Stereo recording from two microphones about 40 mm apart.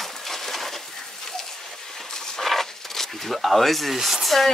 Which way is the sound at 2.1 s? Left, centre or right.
Centre.